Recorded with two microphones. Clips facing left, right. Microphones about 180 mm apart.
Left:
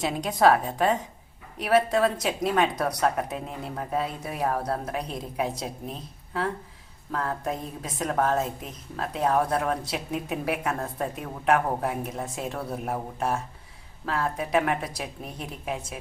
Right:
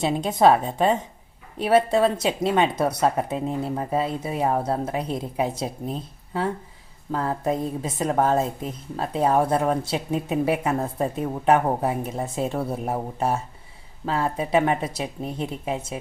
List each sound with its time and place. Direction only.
0.0 s a woman's voice: 25° right (ahead or behind)